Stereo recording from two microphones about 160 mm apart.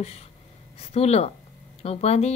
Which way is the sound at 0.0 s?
40° left (ahead or behind).